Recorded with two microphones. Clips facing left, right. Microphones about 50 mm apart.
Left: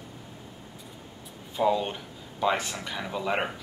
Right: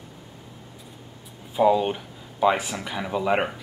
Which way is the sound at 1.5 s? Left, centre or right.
Centre.